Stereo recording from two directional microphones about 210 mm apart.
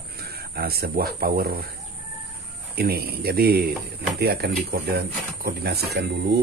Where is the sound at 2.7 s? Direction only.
50° right (ahead or behind).